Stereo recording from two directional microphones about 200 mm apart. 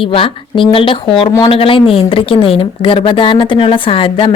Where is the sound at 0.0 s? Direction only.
25° left (ahead or behind).